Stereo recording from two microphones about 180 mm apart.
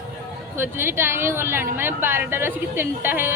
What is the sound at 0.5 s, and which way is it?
A woman's voice, 15° right (ahead or behind).